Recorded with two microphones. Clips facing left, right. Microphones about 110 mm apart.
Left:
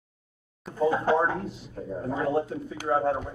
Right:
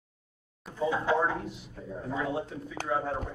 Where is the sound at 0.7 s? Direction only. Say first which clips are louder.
Left 4 dB; 45° left (ahead or behind).